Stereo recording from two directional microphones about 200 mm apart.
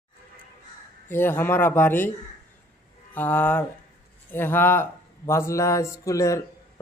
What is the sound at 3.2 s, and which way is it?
Speech, 10° left (ahead or behind).